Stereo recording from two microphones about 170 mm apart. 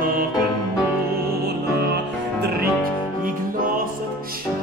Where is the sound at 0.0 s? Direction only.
60° right (ahead or behind).